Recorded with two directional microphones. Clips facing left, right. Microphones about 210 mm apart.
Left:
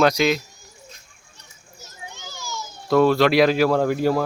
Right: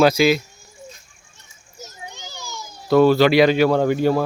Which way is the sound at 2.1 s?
15° right (ahead or behind).